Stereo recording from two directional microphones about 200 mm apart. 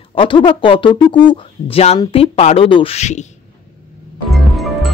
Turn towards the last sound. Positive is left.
turn(degrees=0)  # may be behind; listen again after turning